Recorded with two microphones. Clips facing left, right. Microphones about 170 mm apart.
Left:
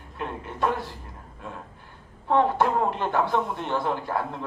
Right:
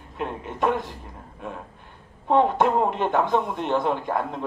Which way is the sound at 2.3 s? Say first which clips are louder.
Right 2 dB; 20° right (ahead or behind).